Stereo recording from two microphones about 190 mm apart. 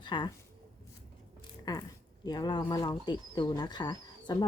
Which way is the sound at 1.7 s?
20° left (ahead or behind).